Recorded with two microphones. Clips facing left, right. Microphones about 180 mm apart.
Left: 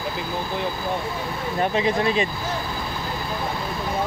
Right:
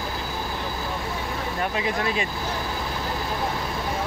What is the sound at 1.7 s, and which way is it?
Speech, 25° left (ahead or behind).